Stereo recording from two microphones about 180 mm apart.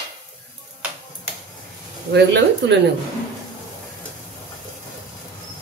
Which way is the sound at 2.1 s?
70° right (ahead or behind).